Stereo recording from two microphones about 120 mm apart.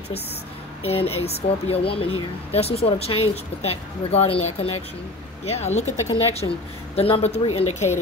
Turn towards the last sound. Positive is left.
turn(degrees=65)  # may be behind; listen again after turning